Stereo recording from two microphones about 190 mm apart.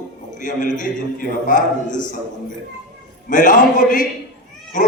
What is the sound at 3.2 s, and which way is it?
Speech, 45° left (ahead or behind).